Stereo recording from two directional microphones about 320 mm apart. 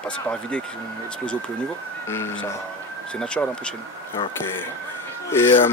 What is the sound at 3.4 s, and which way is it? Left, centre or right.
Speech, centre.